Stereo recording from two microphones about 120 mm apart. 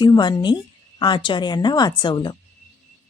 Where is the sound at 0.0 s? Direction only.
40° left (ahead or behind).